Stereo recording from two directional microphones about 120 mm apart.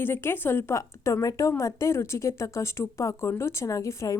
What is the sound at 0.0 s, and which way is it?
A woman's voice, 20° left (ahead or behind).